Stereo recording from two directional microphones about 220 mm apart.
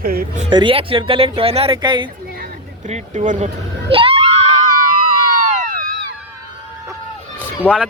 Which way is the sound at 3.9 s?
25° right (ahead or behind).